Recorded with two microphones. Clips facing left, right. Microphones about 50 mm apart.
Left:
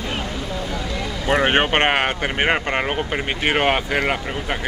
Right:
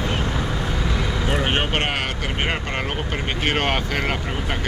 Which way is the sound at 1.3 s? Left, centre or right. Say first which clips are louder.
Left 7 dB; left.